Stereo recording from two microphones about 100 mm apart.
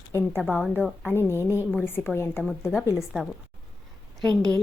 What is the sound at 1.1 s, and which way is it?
A woman's voice, 25° left (ahead or behind).